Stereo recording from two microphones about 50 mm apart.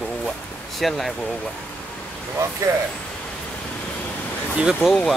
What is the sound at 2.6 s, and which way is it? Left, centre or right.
Speech, right.